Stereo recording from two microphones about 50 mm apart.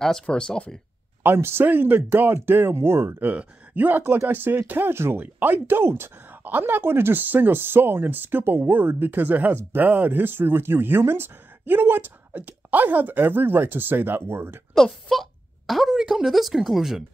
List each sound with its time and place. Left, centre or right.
0.0 s speech: centre
1.2 s speech: right
3.3 s speech: right
4.0 s speech: right
4.9 s speech: right
5.2 s speech: right
14.7 s speech: centre